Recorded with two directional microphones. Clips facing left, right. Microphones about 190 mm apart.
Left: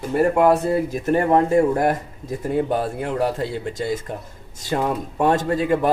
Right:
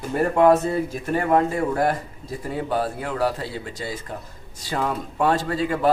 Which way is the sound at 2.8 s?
20° left (ahead or behind).